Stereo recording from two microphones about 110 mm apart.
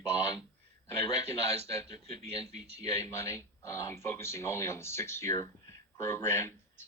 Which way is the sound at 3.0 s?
25° left (ahead or behind).